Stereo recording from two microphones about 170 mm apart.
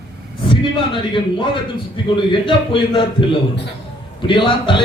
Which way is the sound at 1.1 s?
30° left (ahead or behind).